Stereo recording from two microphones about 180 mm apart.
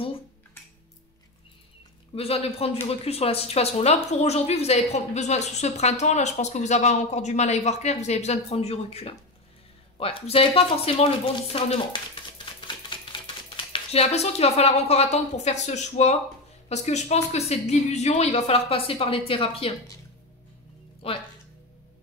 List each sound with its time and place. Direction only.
2.1 s a woman's voice: 35° left (ahead or behind)
21.0 s a woman's voice: 30° left (ahead or behind)